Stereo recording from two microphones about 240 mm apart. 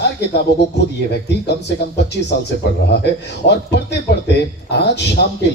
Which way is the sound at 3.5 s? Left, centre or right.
Left.